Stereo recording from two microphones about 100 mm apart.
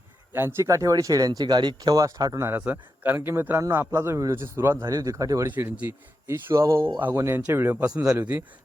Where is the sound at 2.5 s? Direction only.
15° right (ahead or behind).